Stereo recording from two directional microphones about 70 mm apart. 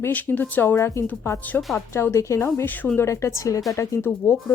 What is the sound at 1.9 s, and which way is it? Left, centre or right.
A woman's voice, left.